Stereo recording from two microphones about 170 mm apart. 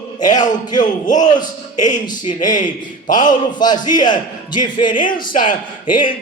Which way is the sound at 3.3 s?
25° left (ahead or behind).